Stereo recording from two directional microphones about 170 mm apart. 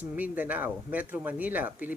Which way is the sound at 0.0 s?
10° right (ahead or behind).